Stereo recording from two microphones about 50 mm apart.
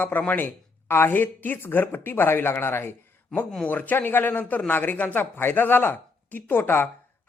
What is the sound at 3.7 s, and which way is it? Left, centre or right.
A man's voice, left.